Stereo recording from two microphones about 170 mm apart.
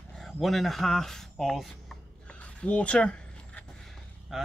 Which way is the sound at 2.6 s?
5° left (ahead or behind).